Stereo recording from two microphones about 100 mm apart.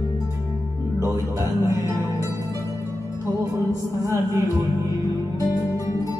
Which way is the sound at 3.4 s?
35° right (ahead or behind).